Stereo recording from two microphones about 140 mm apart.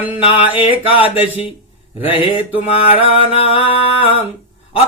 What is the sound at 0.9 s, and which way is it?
Mantra, 40° left (ahead or behind).